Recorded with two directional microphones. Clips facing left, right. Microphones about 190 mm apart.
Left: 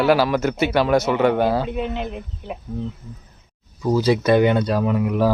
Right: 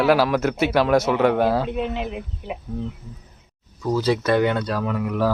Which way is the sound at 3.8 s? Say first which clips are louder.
Left 3 dB; 10° left (ahead or behind).